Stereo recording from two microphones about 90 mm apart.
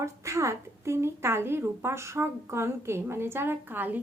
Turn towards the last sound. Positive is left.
turn(degrees=-20)  # may be behind; listen again after turning